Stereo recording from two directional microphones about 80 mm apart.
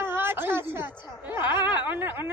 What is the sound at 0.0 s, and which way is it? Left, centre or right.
A man's voice, right.